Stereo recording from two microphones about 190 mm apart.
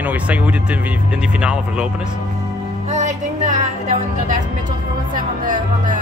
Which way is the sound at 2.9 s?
40° right (ahead or behind).